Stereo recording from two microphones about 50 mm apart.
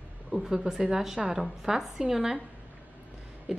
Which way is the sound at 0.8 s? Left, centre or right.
Centre.